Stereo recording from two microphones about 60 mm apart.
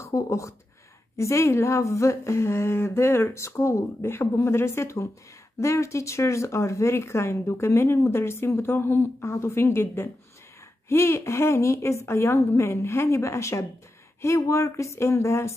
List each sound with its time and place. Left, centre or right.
0.0 s speech: left